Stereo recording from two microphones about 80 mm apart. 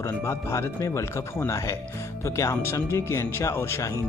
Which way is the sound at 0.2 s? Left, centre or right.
Left.